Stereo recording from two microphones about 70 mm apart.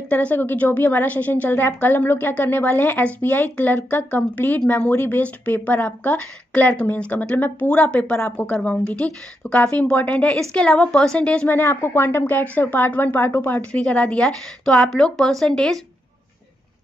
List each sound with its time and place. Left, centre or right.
0.1 s a woman's voice: left